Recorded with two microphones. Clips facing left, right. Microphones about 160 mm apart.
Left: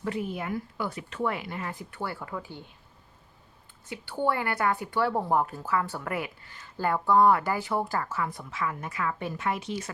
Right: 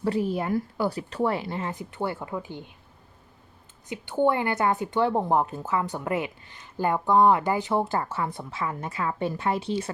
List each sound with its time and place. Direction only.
0.0 s a woman's voice: 35° right (ahead or behind)
3.8 s a woman's voice: 20° right (ahead or behind)